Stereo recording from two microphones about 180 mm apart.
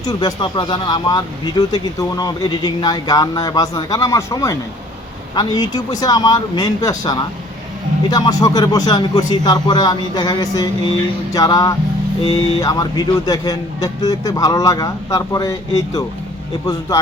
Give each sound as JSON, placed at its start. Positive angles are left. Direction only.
{"t": 0.0, "sound": "speech", "side_deg": 20}